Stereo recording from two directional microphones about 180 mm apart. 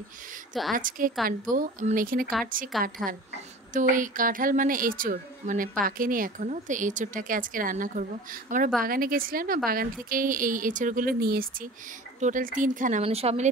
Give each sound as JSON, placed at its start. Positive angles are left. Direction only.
{"t": 0.7, "sound": "speech", "side_deg": -50}
{"t": 1.1, "sound": "a woman's voice", "side_deg": 0}
{"t": 1.5, "sound": "speech", "side_deg": -50}
{"t": 12.2, "sound": "speech", "side_deg": -45}
{"t": 13.0, "sound": "a woman's voice", "side_deg": -35}